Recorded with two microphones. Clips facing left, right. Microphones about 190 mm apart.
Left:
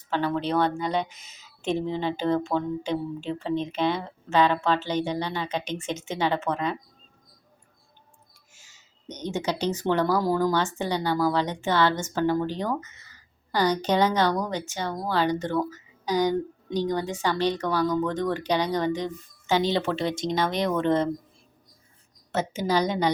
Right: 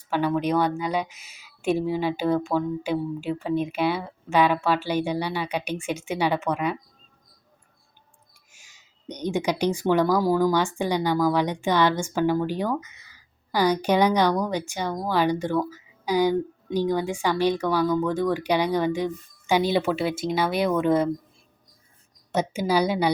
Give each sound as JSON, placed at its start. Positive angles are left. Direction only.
{"t": 0.1, "sound": "a woman's voice", "side_deg": -10}
{"t": 8.5, "sound": "a woman's voice", "side_deg": -15}
{"t": 22.3, "sound": "a woman's voice", "side_deg": -10}